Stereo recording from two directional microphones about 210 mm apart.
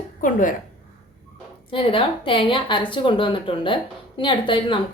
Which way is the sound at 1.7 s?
25° left (ahead or behind).